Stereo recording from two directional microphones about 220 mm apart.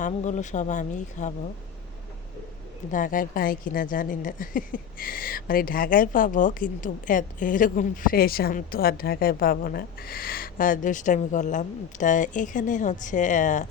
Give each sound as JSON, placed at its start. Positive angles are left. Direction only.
{"t": 0.0, "sound": "speech", "side_deg": 35}
{"t": 2.9, "sound": "speech", "side_deg": 35}